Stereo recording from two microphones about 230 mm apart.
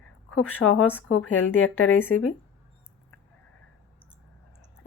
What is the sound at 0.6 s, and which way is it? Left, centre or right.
Speech, left.